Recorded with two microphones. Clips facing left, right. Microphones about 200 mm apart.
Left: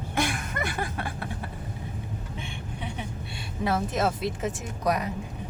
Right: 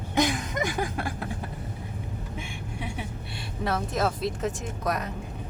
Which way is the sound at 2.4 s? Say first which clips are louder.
Right 1 dB; 10° right (ahead or behind).